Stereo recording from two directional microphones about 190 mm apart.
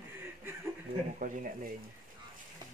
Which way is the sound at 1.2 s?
45° right (ahead or behind).